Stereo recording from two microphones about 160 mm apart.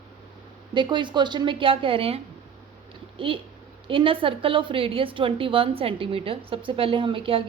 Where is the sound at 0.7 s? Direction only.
30° right (ahead or behind).